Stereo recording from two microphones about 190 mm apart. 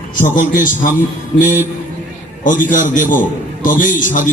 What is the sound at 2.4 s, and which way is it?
A man's voice, 45° left (ahead or behind).